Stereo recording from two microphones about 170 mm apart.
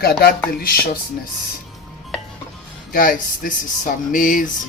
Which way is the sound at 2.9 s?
55° left (ahead or behind).